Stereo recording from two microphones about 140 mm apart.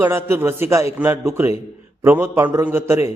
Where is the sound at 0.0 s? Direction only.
15° right (ahead or behind).